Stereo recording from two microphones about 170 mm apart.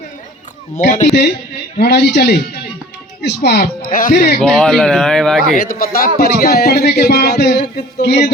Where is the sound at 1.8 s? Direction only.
75° left (ahead or behind).